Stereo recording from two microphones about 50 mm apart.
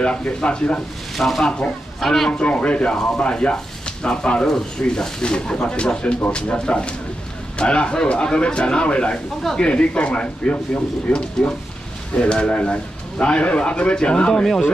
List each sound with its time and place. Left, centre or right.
0.0 s a man's voice: centre
1.1 s a man's voice: centre
2.3 s a man's voice: left
11.4 s a man's voice: centre